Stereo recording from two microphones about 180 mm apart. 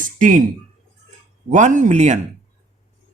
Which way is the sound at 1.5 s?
40° right (ahead or behind).